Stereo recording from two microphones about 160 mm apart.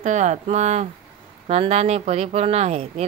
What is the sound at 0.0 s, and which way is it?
Speech, 50° right (ahead or behind).